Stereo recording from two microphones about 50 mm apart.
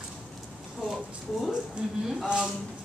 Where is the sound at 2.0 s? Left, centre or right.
Centre.